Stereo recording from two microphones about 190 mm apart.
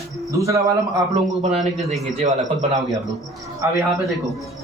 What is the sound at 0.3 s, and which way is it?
Speech, 15° right (ahead or behind).